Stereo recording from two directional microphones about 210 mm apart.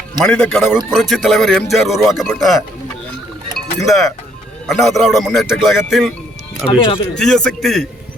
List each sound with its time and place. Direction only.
0.3 s speech: 5° left (ahead or behind)
3.8 s speech: centre (ahead or behind)
6.7 s speech: 25° left (ahead or behind)
7.2 s speech: 5° left (ahead or behind)